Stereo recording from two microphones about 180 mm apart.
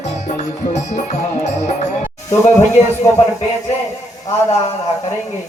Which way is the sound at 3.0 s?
15° left (ahead or behind).